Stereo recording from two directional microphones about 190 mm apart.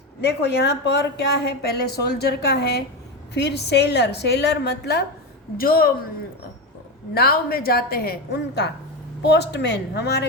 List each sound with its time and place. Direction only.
0.2 s a woman's voice: 65° left (ahead or behind)
7.1 s a woman's voice: 55° left (ahead or behind)